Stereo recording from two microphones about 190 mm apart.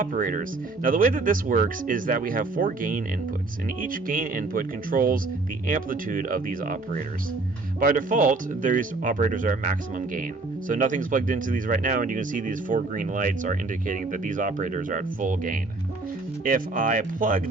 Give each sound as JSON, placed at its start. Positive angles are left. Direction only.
{"t": 0.0, "sound": "speech", "side_deg": -45}